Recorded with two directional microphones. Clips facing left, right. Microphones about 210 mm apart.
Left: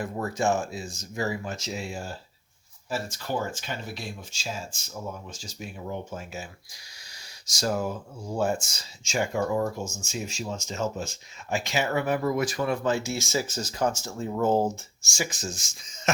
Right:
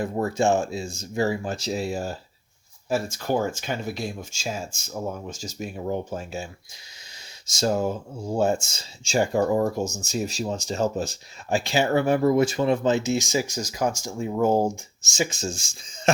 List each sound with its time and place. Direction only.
0.0 s speech: 25° right (ahead or behind)